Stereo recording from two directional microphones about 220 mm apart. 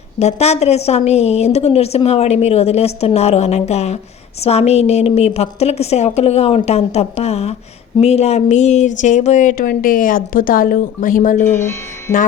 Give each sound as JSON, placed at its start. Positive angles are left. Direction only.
{"t": 0.2, "sound": "a woman's voice", "side_deg": 30}
{"t": 11.4, "sound": "speech", "side_deg": 10}